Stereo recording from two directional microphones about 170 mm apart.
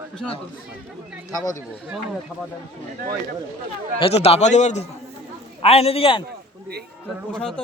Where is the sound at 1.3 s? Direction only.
20° left (ahead or behind).